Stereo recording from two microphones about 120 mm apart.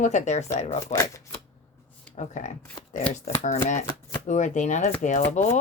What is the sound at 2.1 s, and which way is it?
Speech, 75° left (ahead or behind).